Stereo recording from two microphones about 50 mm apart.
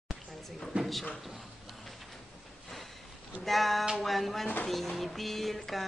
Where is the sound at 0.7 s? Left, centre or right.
Right.